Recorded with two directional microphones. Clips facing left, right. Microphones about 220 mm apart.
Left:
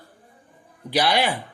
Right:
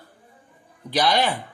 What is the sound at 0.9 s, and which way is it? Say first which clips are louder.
Speech: even; 10° left (ahead or behind).